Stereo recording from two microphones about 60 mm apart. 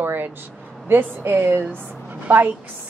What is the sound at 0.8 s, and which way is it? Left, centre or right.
A woman's voice, right.